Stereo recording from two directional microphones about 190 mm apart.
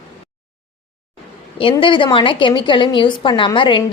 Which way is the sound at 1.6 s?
25° left (ahead or behind).